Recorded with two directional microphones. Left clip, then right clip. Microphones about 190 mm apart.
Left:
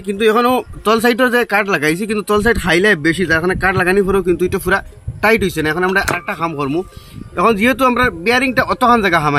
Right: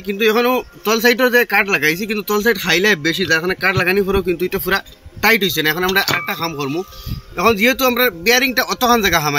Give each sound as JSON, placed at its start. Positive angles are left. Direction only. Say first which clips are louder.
{"t": 0.0, "sound": "a man's voice", "louder": "left 2 dB", "side_deg": 55}